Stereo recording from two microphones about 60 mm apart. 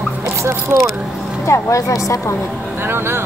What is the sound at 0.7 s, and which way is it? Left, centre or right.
Speech, right.